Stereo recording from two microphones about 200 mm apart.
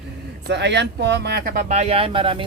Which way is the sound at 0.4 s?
60° right (ahead or behind).